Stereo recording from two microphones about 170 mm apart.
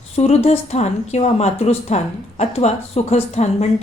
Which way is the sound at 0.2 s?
35° left (ahead or behind).